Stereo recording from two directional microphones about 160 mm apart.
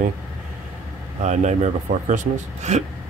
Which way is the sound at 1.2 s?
45° right (ahead or behind).